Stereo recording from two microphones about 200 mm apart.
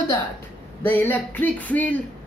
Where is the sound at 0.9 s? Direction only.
10° left (ahead or behind).